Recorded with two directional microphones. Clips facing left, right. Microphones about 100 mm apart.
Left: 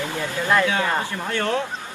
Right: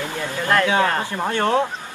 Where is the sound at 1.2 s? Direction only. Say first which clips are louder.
Right 6 dB; 45° right (ahead or behind).